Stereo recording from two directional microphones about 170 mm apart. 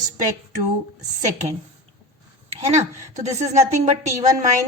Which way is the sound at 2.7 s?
45° right (ahead or behind).